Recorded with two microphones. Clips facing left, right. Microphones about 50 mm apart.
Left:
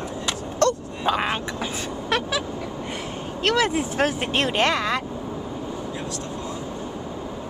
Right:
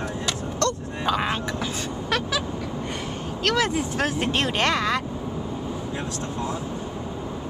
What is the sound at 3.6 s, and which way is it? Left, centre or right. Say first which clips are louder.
Speech: left 2 dB; left.